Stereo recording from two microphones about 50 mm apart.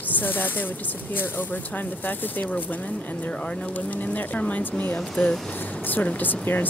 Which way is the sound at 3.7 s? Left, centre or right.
Left.